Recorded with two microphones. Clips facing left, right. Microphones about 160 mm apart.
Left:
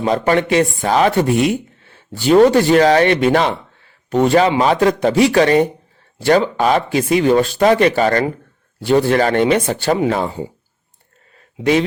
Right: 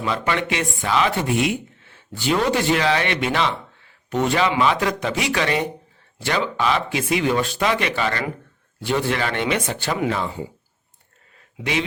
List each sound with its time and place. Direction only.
0.0 s speech: 40° left (ahead or behind)
11.6 s speech: 40° left (ahead or behind)